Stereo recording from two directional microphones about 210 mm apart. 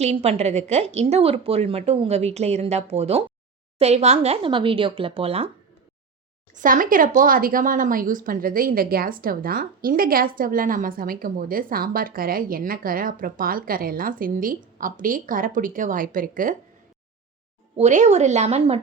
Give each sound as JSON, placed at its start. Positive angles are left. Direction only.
{"t": 0.0, "sound": "a woman's voice", "side_deg": -30}
{"t": 6.5, "sound": "speech", "side_deg": -40}
{"t": 17.7, "sound": "a woman's voice", "side_deg": -35}